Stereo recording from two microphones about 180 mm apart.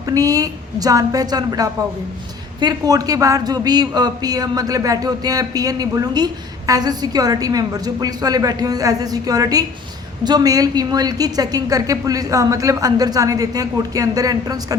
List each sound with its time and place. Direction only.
0.0 s a woman's voice: 20° right (ahead or behind)